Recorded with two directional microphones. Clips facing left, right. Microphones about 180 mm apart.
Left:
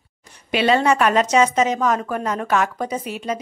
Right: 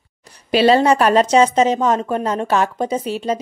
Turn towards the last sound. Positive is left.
turn(degrees=-30)  # may be behind; listen again after turning